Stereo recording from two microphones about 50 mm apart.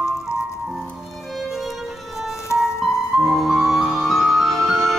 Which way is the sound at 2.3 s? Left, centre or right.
Left.